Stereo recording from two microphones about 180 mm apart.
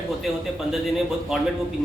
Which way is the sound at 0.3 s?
Centre (ahead or behind).